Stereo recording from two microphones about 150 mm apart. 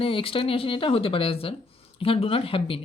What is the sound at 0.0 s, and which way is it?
Speech, 35° left (ahead or behind).